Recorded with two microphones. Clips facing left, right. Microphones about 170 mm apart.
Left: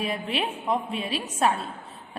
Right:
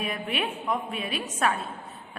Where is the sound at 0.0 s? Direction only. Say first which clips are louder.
Left 2 dB; 30° left (ahead or behind).